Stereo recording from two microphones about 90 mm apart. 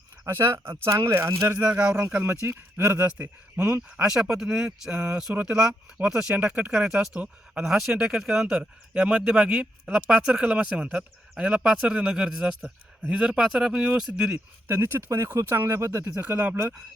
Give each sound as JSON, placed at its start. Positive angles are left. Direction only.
{"t": 0.3, "sound": "speech", "side_deg": -30}
{"t": 1.7, "sound": "speech", "side_deg": -15}
{"t": 4.0, "sound": "speech", "side_deg": -5}
{"t": 14.3, "sound": "speech", "side_deg": -25}
{"t": 16.2, "sound": "speech", "side_deg": -15}